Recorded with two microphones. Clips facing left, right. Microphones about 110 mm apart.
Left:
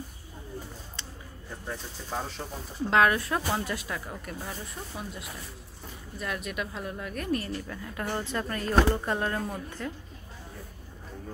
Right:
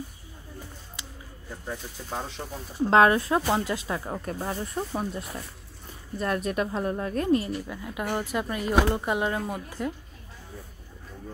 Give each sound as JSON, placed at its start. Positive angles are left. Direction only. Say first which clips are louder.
{"t": 1.7, "sound": "speech", "louder": "right 1 dB", "side_deg": 0}
{"t": 2.9, "sound": "speech", "louder": "right 4 dB", "side_deg": -30}
{"t": 4.5, "sound": "speech", "louder": "right 9 dB", "side_deg": -45}
{"t": 6.2, "sound": "a woman's voice", "louder": "right 7 dB", "side_deg": -40}